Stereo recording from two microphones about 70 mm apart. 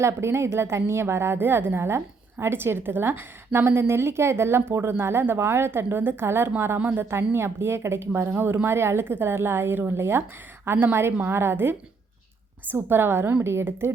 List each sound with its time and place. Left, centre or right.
0.0 s a woman's voice: right